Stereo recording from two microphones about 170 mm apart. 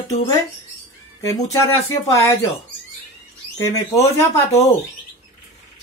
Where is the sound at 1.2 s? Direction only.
20° left (ahead or behind).